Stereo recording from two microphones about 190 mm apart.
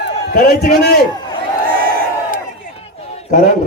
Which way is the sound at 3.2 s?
35° left (ahead or behind).